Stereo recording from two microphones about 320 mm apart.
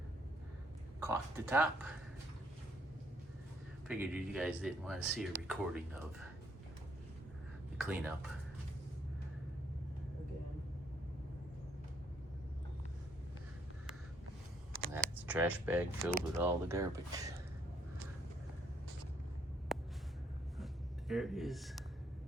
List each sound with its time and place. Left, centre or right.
0.9 s speech: centre
3.8 s speech: centre
7.8 s speech: centre
14.9 s speech: centre
19.7 s a sound: centre
21.1 s speech: centre